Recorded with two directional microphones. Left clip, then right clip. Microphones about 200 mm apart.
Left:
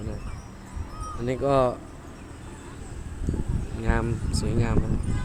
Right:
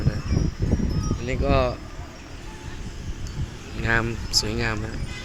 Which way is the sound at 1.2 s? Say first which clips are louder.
Left 1 dB; 20° left (ahead or behind).